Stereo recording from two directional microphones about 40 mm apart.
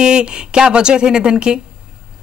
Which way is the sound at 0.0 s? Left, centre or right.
Right.